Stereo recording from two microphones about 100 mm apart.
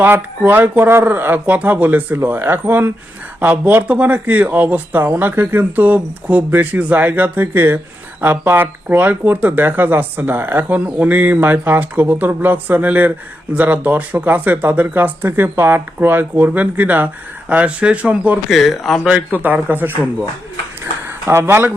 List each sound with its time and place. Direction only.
0.0 s speech: 20° right (ahead or behind)
18.5 s speech: centre (ahead or behind)
19.0 s speech: 15° right (ahead or behind)
21.2 s speech: 25° right (ahead or behind)